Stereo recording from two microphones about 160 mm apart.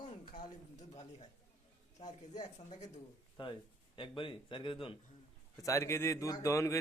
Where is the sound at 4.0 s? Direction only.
30° left (ahead or behind).